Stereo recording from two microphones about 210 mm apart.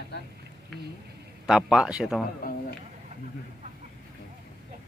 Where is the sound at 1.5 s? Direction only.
5° right (ahead or behind).